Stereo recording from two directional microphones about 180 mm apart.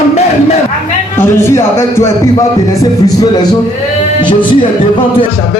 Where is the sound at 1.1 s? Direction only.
15° left (ahead or behind).